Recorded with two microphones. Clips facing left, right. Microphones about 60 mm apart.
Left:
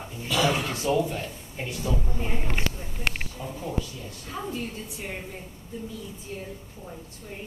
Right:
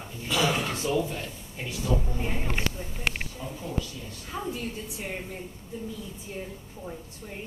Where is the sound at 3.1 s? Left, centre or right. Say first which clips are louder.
Left 1 dB; left.